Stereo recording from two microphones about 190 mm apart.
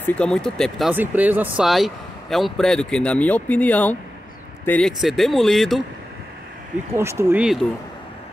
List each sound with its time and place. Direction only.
0.0 s speech: 5° left (ahead or behind)
6.9 s speech: 15° right (ahead or behind)